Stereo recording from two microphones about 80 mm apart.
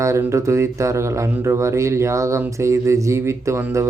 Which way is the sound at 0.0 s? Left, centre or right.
Right.